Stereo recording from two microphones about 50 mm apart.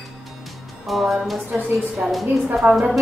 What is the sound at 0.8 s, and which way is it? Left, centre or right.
Music, centre.